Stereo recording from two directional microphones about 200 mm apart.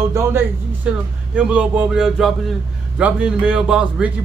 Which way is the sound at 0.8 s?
5° right (ahead or behind).